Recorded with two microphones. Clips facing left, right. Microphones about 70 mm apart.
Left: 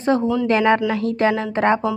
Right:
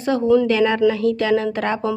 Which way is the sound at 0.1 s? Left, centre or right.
Left.